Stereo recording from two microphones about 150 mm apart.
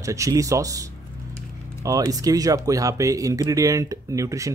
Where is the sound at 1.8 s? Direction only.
25° right (ahead or behind).